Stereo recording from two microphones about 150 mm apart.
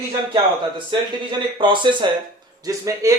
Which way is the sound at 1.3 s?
30° right (ahead or behind).